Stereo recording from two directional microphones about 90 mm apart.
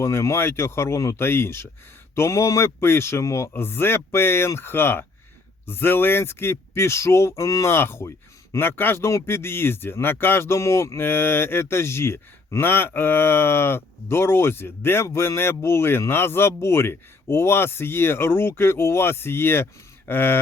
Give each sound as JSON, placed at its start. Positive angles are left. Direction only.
{"t": 0.0, "sound": "speech", "side_deg": 30}